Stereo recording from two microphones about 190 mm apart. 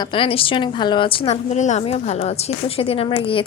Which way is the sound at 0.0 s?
25° left (ahead or behind).